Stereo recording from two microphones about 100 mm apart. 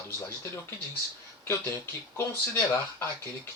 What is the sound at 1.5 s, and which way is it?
Speech, 20° left (ahead or behind).